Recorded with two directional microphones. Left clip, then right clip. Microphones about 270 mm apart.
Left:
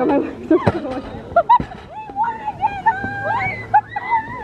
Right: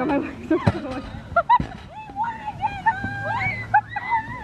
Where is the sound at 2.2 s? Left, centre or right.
Centre.